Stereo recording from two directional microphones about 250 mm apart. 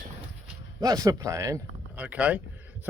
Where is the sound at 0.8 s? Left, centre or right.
Centre.